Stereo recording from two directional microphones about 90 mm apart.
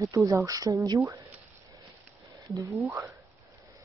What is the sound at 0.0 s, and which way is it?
Speech, 35° right (ahead or behind).